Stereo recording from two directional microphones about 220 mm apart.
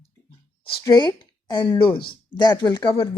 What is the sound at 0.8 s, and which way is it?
A woman's voice, 20° left (ahead or behind).